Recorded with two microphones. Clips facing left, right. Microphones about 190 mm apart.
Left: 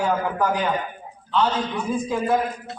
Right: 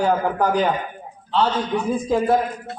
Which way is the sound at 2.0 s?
35° right (ahead or behind).